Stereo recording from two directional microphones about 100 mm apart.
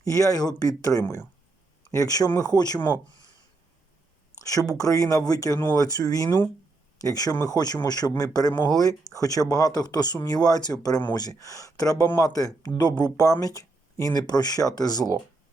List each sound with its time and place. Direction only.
0.0 s speech: 35° left (ahead or behind)
4.4 s speech: 35° left (ahead or behind)